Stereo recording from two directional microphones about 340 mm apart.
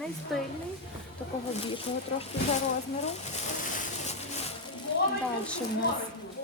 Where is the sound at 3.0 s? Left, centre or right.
Left.